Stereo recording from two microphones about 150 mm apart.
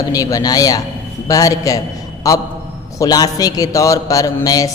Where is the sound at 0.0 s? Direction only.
25° left (ahead or behind).